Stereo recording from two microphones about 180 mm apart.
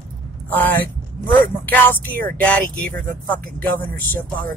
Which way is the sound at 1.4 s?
10° left (ahead or behind).